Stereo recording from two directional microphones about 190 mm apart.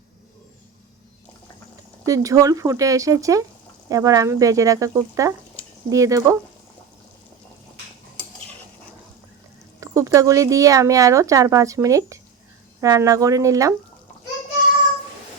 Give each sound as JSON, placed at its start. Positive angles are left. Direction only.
{"t": 2.0, "sound": "speech", "side_deg": -15}
{"t": 9.8, "sound": "speech", "side_deg": -15}